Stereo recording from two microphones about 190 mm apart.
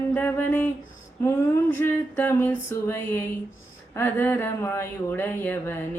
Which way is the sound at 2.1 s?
10° left (ahead or behind).